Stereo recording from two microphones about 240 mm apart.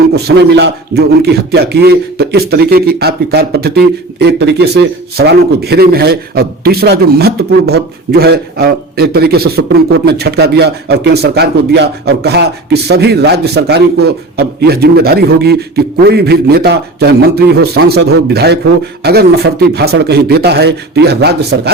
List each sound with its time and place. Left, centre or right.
0.3 s a man's voice: right